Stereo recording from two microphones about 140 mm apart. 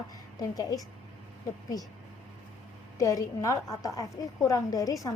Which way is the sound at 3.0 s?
25° left (ahead or behind).